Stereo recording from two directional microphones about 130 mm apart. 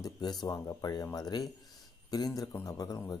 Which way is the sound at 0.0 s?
30° left (ahead or behind).